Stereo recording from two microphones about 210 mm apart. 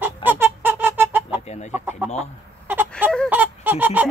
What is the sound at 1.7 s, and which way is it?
Chicken, 10° right (ahead or behind).